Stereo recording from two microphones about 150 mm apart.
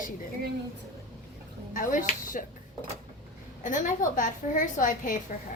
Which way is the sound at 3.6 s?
55° left (ahead or behind).